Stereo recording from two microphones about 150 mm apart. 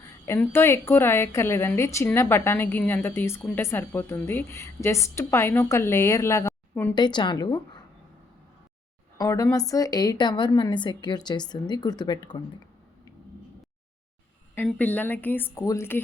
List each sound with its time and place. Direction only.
0.3 s a woman's voice: 15° left (ahead or behind)
6.9 s a woman's voice: 30° left (ahead or behind)
9.1 s a woman's voice: 25° left (ahead or behind)
14.8 s a woman's voice: 10° left (ahead or behind)